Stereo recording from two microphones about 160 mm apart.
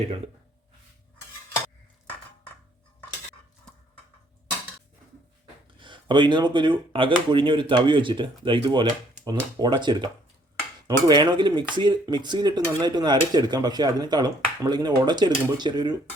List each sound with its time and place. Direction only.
5.8 s speech: 30° right (ahead or behind)